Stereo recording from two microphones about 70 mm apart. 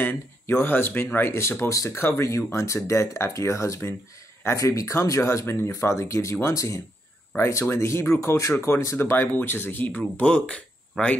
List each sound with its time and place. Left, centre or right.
0.0 s speech: left
5.2 s speech: left; by 11.1 s centre